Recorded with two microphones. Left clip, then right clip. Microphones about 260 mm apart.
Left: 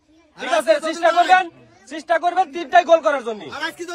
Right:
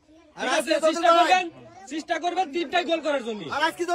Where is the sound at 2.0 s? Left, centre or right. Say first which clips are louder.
Left 7 dB; centre.